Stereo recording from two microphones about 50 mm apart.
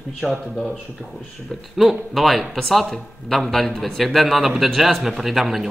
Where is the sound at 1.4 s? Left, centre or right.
Centre.